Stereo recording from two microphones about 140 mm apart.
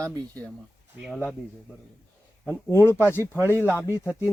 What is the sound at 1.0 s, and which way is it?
Speech, 5° right (ahead or behind).